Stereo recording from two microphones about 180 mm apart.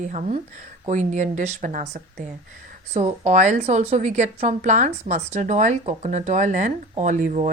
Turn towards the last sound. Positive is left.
turn(degrees=-45)  # may be behind; listen again after turning